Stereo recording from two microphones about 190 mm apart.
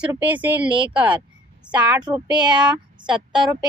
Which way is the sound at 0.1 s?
10° right (ahead or behind).